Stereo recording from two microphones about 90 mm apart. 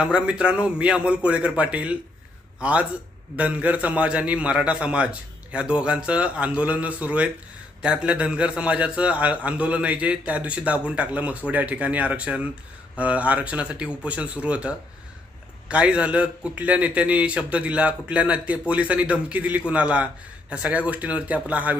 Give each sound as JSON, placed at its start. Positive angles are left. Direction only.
{"t": 0.0, "sound": "a man's voice", "side_deg": -10}